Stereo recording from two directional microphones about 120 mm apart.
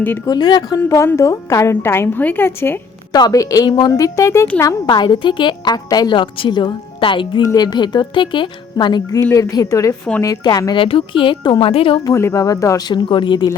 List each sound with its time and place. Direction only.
0.3 s a woman's voice: 40° left (ahead or behind)
0.8 s a woman's voice: 25° left (ahead or behind)
3.1 s a woman's voice: 35° left (ahead or behind)
4.9 s a woman's voice: 40° left (ahead or behind)
7.4 s a woman's voice: 35° left (ahead or behind)
10.8 s speech: 50° left (ahead or behind)
12.0 s a woman's voice: 25° left (ahead or behind)
13.1 s a woman's voice: 40° left (ahead or behind)